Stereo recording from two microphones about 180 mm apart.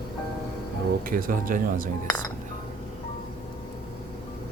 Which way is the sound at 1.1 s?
50° right (ahead or behind).